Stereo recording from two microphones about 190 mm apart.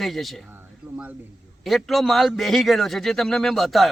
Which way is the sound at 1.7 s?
Centre (ahead or behind).